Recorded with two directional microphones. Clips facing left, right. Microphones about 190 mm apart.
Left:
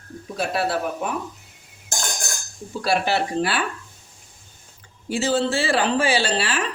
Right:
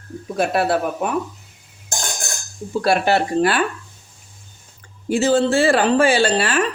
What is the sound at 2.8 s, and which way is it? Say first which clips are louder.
Speech: right 4 dB; 55° right (ahead or behind).